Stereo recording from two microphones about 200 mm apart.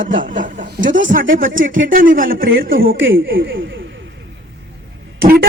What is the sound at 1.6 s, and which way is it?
Speech, 70° right (ahead or behind).